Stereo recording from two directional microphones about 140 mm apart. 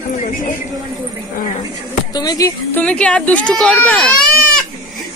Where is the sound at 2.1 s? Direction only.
25° left (ahead or behind).